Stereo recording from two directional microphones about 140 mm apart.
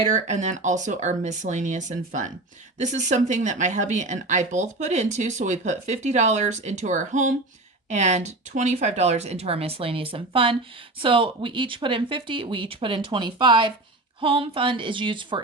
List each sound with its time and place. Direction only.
0.1 s speech: 60° right (ahead or behind); by 15.4 s 35° right (ahead or behind)